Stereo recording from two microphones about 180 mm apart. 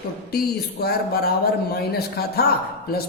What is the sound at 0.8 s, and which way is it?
A woman's voice, 60° left (ahead or behind).